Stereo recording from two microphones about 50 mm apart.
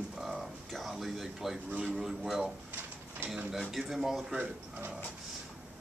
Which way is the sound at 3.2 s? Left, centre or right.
Right.